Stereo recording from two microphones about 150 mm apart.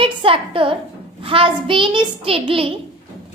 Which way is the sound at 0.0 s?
35° right (ahead or behind).